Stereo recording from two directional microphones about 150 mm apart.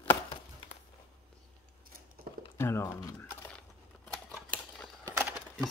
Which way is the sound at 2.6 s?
15° left (ahead or behind).